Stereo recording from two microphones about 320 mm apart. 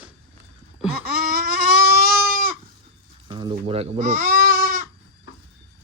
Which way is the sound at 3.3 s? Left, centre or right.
Centre.